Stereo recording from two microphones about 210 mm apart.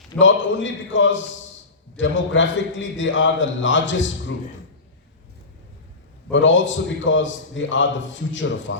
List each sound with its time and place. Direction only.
0.2 s a man's voice: 65° left (ahead or behind)
6.3 s a man's voice: 65° left (ahead or behind)